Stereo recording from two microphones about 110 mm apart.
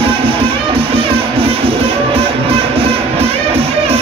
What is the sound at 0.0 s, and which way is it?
Music, 60° right (ahead or behind).